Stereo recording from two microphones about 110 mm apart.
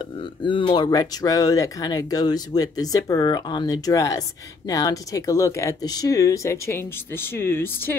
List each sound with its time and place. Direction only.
0.4 s speech: 50° left (ahead or behind)
0.8 s speech: 30° left (ahead or behind)